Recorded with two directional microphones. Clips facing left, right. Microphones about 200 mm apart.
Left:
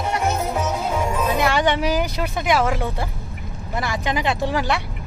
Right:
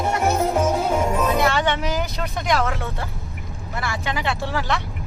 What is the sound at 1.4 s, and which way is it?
Vehicle, 15° left (ahead or behind).